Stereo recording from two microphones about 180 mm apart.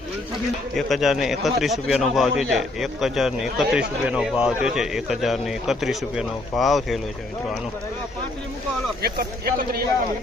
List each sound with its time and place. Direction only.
0.8 s a man's voice: centre (ahead or behind)
9.0 s speech: 60° right (ahead or behind)